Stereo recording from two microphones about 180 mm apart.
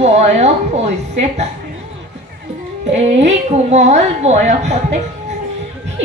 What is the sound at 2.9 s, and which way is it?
A woman's voice, 40° right (ahead or behind).